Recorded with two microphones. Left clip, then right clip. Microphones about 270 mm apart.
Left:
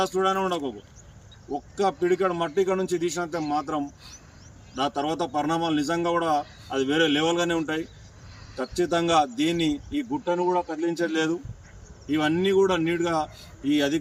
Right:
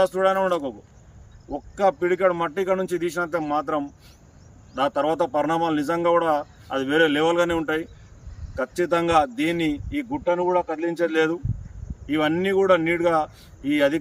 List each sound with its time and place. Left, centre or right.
0.0 s a man's voice: centre
1.7 s a man's voice: centre